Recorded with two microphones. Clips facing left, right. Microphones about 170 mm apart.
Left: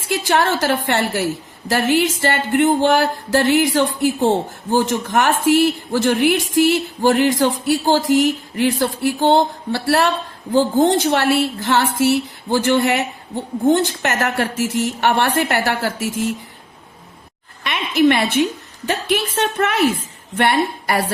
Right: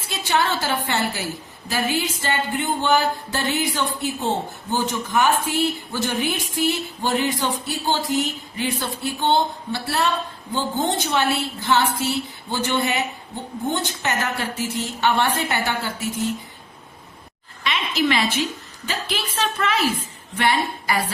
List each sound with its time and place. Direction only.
0.1 s a woman's voice: 80° left
17.6 s a sound: 60° left (ahead or behind)
18.9 s a woman's voice: 65° left (ahead or behind)